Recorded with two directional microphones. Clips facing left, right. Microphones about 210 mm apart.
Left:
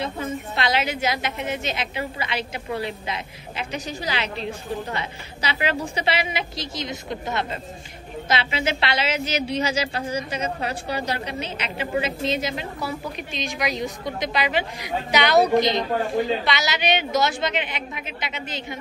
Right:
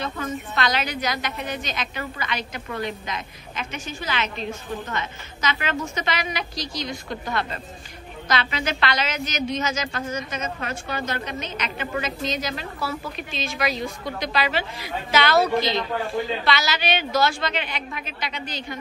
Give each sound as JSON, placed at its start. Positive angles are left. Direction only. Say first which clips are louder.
{"t": 0.0, "sound": "a woman's voice", "louder": "left 1 dB", "side_deg": 25}